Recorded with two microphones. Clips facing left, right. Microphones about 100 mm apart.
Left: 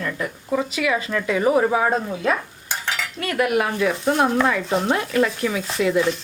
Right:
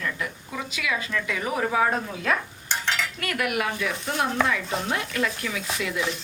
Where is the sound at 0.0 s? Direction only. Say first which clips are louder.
Left 4 dB; 40° left (ahead or behind).